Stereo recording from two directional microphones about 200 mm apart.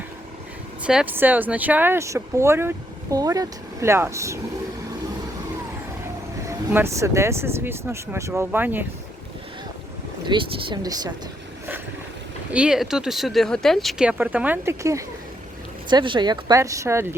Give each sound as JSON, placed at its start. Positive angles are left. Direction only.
{"t": 0.9, "sound": "speech", "side_deg": -5}
{"t": 6.7, "sound": "speech", "side_deg": -10}
{"t": 10.2, "sound": "speech", "side_deg": -25}
{"t": 12.5, "sound": "speech", "side_deg": -5}